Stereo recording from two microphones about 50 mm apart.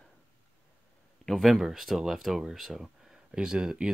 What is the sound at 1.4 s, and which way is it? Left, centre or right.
Speech, centre.